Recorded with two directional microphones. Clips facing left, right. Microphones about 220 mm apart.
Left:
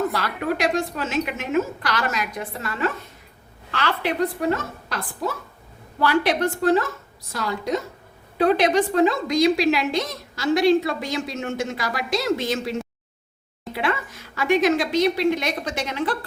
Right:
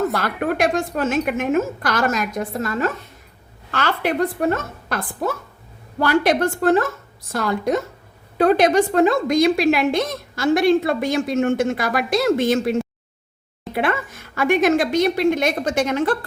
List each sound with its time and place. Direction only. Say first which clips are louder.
0.1 s a woman's voice: right 3 dB; 50° right (ahead or behind)
13.7 s a woman's voice: right 4 dB; 50° right (ahead or behind)